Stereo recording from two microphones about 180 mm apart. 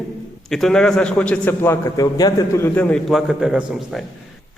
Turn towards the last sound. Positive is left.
turn(degrees=-5)  # may be behind; listen again after turning